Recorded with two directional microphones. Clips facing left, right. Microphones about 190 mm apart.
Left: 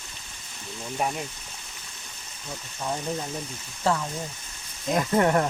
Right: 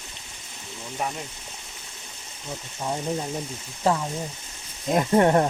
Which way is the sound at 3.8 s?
20° right (ahead or behind).